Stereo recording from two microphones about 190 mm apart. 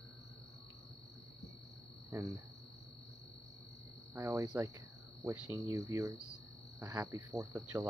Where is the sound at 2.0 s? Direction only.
15° right (ahead or behind).